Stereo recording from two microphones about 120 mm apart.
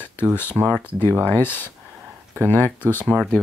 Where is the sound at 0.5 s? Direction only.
15° right (ahead or behind).